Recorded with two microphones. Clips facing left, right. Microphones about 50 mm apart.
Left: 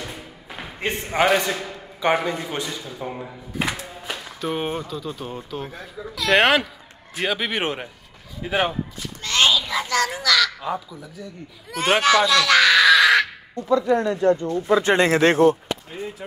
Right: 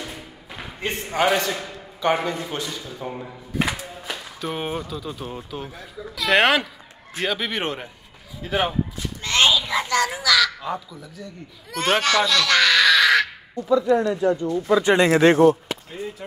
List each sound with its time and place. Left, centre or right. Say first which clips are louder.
0.0 s a sound: even; centre
0.8 s a man's voice: left 1 dB; centre
9.2 s a child's voice: even; centre
14.2 s speech: left 2 dB; left
15.9 s a man's voice: even; centre